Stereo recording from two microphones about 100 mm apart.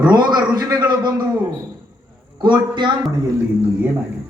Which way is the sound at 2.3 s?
50° right (ahead or behind).